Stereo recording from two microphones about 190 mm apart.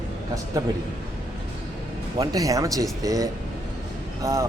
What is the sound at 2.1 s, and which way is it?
Speech, 20° right (ahead or behind).